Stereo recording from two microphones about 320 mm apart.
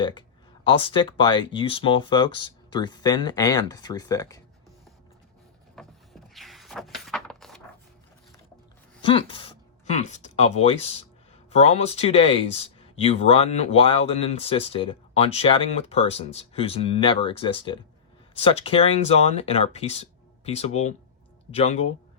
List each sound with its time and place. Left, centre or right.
0.0 s speech: centre
5.7 s a sound: centre
9.0 s speech: centre